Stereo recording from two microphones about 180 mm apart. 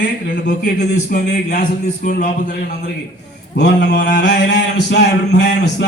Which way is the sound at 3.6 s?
70° left (ahead or behind).